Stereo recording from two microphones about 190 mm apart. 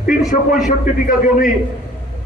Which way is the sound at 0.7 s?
45° left (ahead or behind).